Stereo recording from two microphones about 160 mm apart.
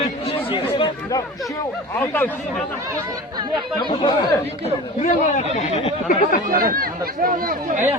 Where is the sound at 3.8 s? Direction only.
30° left (ahead or behind).